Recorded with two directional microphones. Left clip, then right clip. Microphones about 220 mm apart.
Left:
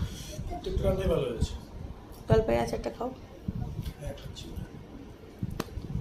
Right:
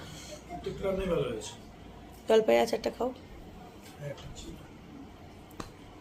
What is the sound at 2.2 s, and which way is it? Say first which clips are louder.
Speech: right 3 dB; 20° right (ahead or behind).